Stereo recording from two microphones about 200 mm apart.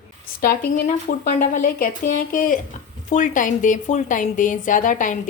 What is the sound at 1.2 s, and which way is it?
A woman's voice, 40° left (ahead or behind).